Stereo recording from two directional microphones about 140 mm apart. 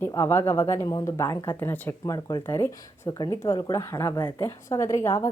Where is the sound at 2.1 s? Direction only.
25° left (ahead or behind).